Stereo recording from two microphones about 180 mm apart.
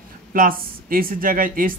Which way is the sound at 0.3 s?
50° right (ahead or behind).